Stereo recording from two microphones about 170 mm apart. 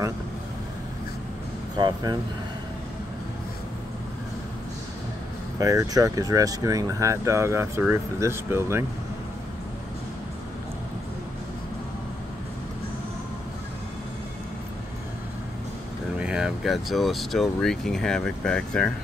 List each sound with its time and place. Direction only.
1.8 s speech: 25° right (ahead or behind)
5.6 s speech: 20° right (ahead or behind)
16.2 s speech: 5° right (ahead or behind)